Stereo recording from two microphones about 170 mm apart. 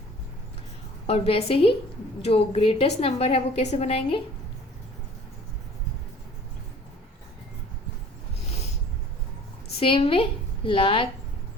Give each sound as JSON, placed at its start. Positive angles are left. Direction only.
{"t": 1.0, "sound": "a woman's voice", "side_deg": 35}
{"t": 9.8, "sound": "a woman's voice", "side_deg": 30}